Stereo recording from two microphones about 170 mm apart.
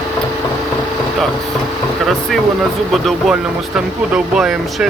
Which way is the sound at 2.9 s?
Centre (ahead or behind).